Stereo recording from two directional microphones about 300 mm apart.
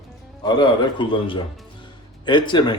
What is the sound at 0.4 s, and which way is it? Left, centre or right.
Speech, centre.